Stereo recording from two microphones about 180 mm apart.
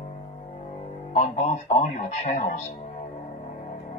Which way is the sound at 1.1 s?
40° left (ahead or behind).